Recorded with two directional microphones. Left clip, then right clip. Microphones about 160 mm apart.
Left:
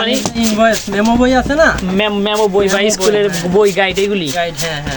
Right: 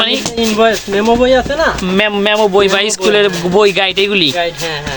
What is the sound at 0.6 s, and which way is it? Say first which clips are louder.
Speech: right 1 dB; 20° right (ahead or behind).